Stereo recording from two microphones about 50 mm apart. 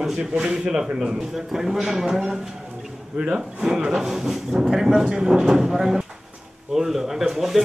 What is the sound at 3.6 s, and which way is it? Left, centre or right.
Speech, centre.